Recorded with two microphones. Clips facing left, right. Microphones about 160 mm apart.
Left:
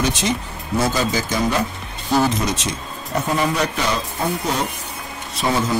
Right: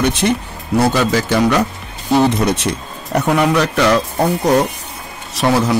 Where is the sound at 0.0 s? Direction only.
60° right (ahead or behind); by 4.0 s 80° right.